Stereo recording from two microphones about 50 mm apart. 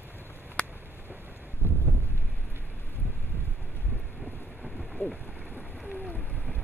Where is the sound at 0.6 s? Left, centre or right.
Left.